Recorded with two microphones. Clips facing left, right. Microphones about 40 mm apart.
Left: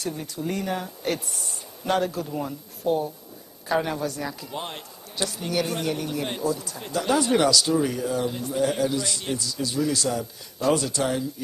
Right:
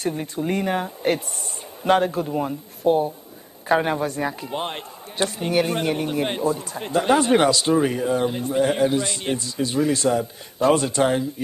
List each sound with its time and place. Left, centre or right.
0.0 s a man's voice: right